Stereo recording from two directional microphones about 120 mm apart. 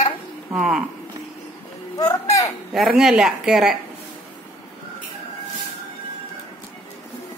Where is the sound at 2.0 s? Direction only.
30° left (ahead or behind).